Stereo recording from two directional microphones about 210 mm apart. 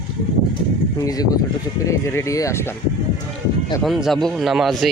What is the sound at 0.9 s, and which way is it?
Speech, 20° left (ahead or behind).